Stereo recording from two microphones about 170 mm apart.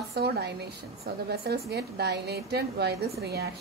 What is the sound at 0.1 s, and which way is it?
A woman's voice, 75° right (ahead or behind).